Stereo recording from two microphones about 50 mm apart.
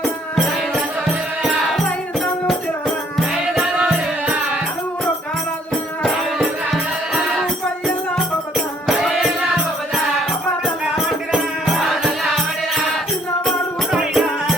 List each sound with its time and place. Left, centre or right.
1.5 s music: centre
3.8 s music: right
8.5 s music: centre
10.9 s music: centre
14.1 s music: centre